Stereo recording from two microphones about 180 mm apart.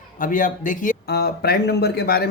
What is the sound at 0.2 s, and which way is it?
Speech, 45° left (ahead or behind).